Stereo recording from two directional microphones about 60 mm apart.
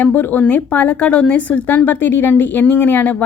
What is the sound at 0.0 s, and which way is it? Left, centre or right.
A woman's voice, left.